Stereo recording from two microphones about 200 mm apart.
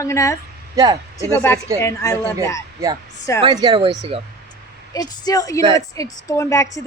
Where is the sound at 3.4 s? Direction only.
20° right (ahead or behind).